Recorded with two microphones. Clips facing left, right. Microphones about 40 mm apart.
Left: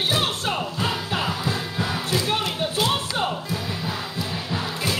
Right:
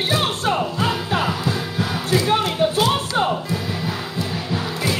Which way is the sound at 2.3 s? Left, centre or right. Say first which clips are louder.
Right 6 dB; right.